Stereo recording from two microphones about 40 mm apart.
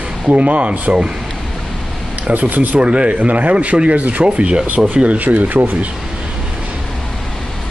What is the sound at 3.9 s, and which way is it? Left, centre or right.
Speech, right.